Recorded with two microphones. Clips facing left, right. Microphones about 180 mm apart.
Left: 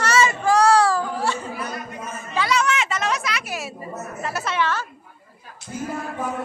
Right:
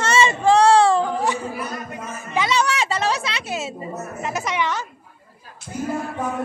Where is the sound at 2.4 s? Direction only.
30° right (ahead or behind).